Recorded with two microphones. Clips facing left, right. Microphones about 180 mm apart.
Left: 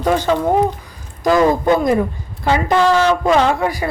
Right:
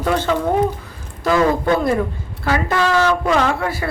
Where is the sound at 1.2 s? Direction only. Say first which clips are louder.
Left 3 dB; 20° left (ahead or behind).